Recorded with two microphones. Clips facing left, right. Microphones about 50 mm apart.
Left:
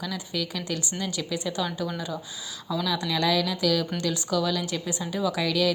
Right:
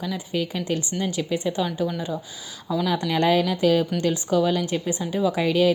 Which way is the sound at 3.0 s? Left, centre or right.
Right.